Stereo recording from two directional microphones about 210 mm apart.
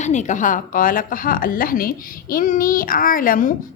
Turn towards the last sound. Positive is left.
turn(degrees=40)  # may be behind; listen again after turning